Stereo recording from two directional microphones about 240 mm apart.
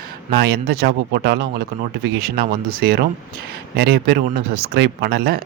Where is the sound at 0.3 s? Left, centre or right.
Right.